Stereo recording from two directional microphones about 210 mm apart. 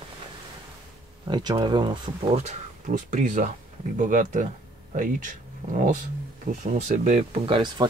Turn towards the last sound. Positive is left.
turn(degrees=-25)  # may be behind; listen again after turning